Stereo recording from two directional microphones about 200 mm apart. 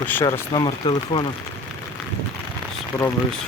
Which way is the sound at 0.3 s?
20° left (ahead or behind).